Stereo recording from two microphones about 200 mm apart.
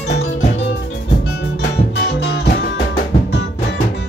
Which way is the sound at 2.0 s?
55° left (ahead or behind).